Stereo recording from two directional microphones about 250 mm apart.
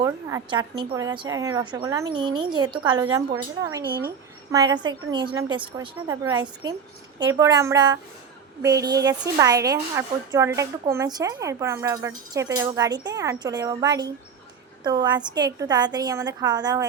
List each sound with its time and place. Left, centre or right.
0.0 s a woman's voice: centre